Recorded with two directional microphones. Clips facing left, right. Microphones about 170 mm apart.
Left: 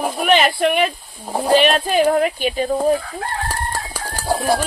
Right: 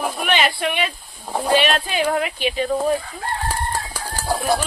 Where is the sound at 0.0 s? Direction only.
45° left (ahead or behind).